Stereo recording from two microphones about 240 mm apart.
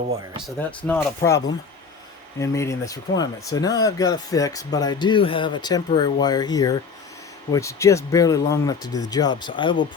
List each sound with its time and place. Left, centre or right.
0.9 s speech: centre